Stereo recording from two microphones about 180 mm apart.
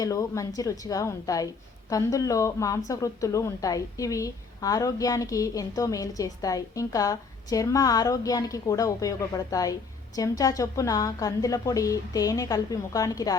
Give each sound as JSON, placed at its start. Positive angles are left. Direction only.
{"t": 0.0, "sound": "speech", "side_deg": 20}